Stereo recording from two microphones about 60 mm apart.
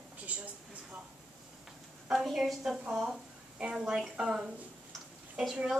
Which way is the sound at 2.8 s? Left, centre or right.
Centre.